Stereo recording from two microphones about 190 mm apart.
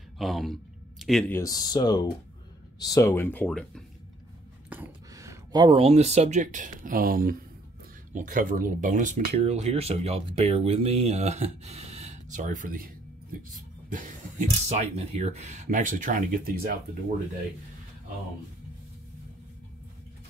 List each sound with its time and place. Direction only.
0.2 s a sound: centre (ahead or behind)
1.3 s speech: 20° left (ahead or behind)
4.6 s speech: 10° right (ahead or behind); by 16.7 s 50° right (ahead or behind)